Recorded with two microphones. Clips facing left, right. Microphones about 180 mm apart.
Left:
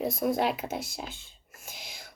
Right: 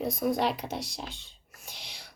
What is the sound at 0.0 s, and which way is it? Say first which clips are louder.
A child's voice: left 1 dB; centre (ahead or behind).